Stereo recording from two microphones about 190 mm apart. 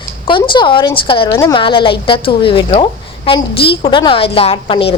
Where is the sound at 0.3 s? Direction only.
25° left (ahead or behind).